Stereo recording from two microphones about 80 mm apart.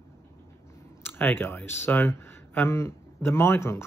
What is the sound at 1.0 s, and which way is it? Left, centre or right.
Speech, left.